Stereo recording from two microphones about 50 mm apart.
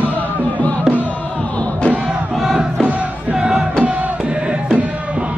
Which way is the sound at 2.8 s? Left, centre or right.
Right.